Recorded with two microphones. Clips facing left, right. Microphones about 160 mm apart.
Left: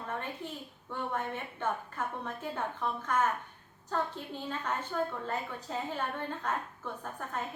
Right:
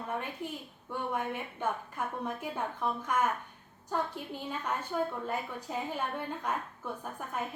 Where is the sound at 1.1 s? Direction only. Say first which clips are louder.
Right 1 dB; 10° right (ahead or behind).